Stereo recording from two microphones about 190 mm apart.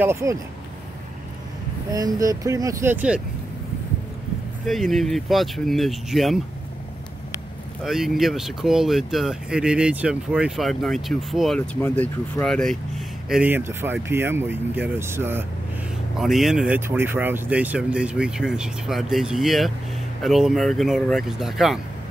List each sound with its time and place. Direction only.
0.0 s speech: 15° right (ahead or behind)
1.9 s speech: 20° right (ahead or behind)
4.6 s speech: centre (ahead or behind)
7.8 s speech: centre (ahead or behind)
13.3 s speech: 10° right (ahead or behind)
16.2 s speech: centre (ahead or behind)